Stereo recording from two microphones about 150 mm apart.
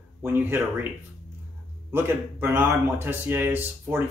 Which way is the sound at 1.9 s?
15° right (ahead or behind).